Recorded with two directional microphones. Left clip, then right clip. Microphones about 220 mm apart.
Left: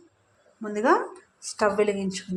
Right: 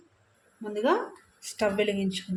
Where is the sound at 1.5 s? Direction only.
5° right (ahead or behind).